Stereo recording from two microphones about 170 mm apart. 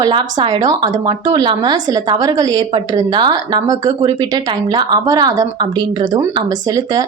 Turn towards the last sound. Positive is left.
turn(degrees=-20)  # may be behind; listen again after turning